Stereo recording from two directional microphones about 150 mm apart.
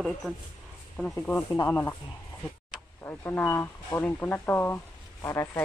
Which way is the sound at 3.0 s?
15° left (ahead or behind).